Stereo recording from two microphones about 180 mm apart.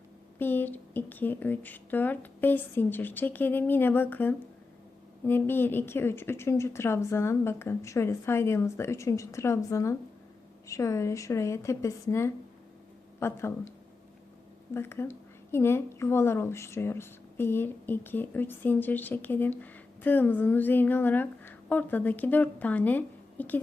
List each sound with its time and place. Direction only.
0.3 s speech: 10° left (ahead or behind)